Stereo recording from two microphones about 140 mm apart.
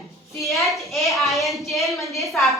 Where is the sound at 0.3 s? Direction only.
Centre (ahead or behind).